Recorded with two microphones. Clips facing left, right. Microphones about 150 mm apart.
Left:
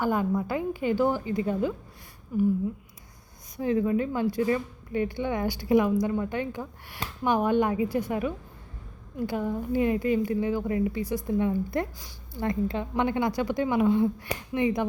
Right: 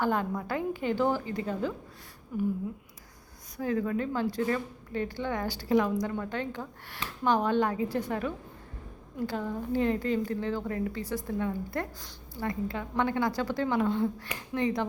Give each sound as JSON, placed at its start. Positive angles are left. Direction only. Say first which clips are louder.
{"t": 0.0, "sound": "a woman's voice", "louder": "left 3 dB", "side_deg": 10}
{"t": 3.8, "sound": "a woman's voice", "louder": "left 4 dB", "side_deg": 10}
{"t": 14.3, "sound": "speech", "louder": "left 6 dB", "side_deg": 35}